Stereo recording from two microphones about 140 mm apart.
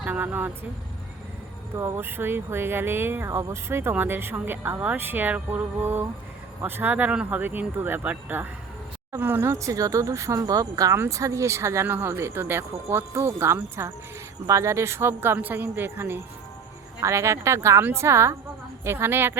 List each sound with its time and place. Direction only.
0.0 s speech: 10° right (ahead or behind)
1.7 s speech: 20° right (ahead or behind)